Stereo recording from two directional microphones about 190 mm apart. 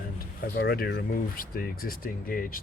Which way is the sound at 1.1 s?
50° left (ahead or behind).